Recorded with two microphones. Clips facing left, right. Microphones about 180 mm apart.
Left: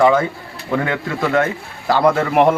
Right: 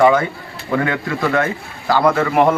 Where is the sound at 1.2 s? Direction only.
10° left (ahead or behind).